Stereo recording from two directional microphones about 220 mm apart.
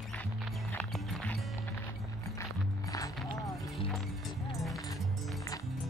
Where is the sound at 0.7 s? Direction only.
5° left (ahead or behind).